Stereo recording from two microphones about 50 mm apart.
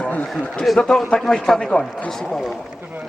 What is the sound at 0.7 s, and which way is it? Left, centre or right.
Speech, centre.